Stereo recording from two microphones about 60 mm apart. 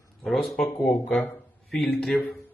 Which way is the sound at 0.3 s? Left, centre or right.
Centre.